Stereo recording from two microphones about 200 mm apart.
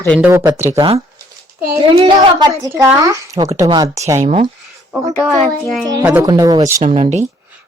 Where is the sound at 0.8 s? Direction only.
25° right (ahead or behind).